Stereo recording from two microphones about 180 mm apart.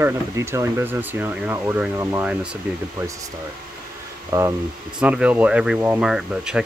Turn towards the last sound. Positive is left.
turn(degrees=-5)  # may be behind; listen again after turning